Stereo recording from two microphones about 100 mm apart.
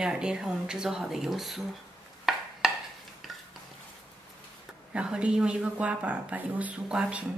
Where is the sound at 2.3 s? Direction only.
Centre (ahead or behind).